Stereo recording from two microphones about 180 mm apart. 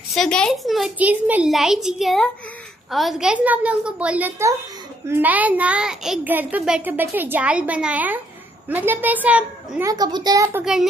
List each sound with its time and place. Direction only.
0.1 s a child's voice: 5° left (ahead or behind); by 10.6 s 20° right (ahead or behind)
10.6 s a child's voice: 5° right (ahead or behind)